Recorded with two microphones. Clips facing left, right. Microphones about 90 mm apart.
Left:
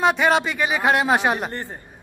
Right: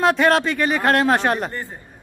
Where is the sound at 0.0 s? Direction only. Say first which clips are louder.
Right 2 dB; 5° left (ahead or behind).